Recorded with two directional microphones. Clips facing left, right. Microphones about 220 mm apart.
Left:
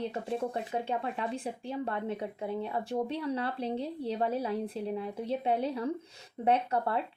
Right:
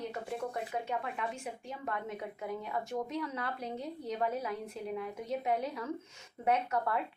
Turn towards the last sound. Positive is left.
turn(degrees=30)  # may be behind; listen again after turning